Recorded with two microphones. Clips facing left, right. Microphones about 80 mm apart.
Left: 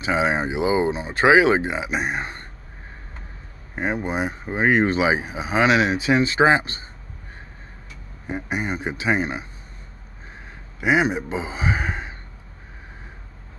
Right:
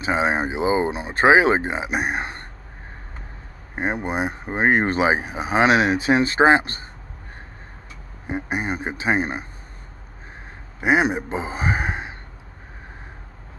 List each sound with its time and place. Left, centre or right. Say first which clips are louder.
0.0 s speech: even; right
1.9 s speech: right 1 dB; right
3.7 s speech: even; right
5.4 s speech: right 1 dB; right
8.5 s speech: left 1 dB; right
10.8 s a man's voice: right 1 dB; right